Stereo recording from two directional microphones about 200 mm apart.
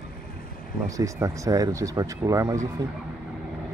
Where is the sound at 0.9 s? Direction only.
15° right (ahead or behind).